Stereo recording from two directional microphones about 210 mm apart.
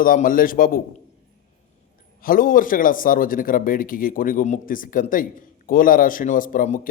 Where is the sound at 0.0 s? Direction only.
40° left (ahead or behind).